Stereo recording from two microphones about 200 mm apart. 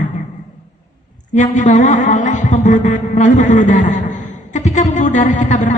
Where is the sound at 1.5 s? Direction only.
40° left (ahead or behind).